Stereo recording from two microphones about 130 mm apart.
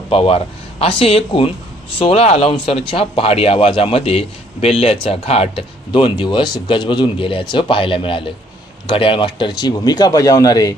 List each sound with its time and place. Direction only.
0.1 s speech: 50° left (ahead or behind); by 10.7 s 25° left (ahead or behind)